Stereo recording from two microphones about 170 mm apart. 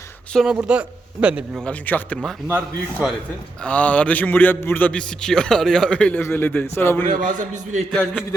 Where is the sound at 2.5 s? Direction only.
10° right (ahead or behind).